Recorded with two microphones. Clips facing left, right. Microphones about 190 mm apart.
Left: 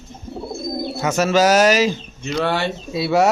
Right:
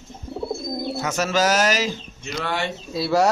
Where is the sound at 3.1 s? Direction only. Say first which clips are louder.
Left 3 dB; centre (ahead or behind).